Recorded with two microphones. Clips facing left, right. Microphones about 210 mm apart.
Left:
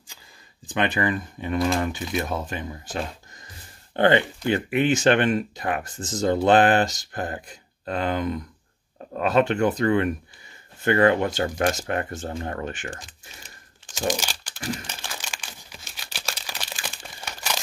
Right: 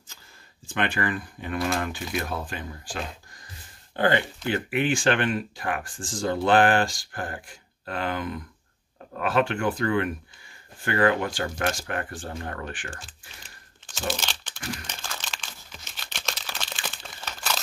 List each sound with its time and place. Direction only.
0.7 s speech: 20° left (ahead or behind)
13.8 s crumpling: 15° left (ahead or behind)